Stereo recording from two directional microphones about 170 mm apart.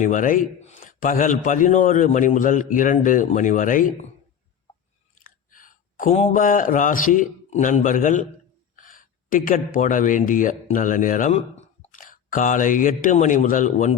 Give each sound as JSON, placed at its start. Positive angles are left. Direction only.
{"t": 0.0, "sound": "a man's voice", "side_deg": 50}
{"t": 5.2, "sound": "speech", "side_deg": 50}